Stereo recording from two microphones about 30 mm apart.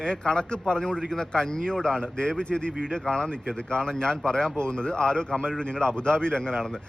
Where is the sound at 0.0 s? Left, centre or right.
Left.